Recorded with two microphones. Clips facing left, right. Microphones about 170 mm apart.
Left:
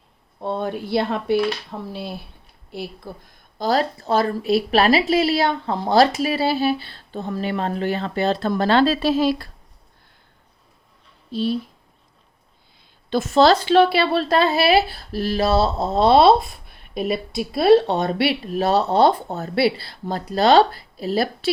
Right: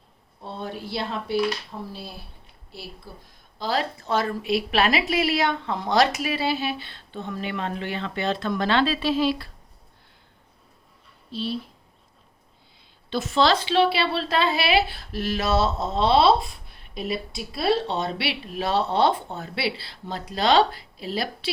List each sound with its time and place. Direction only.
0.4 s speech: 55° left (ahead or behind)
3.6 s a woman's voice: 40° left (ahead or behind)
11.3 s speech: 45° left (ahead or behind)
13.1 s speech: 45° left (ahead or behind)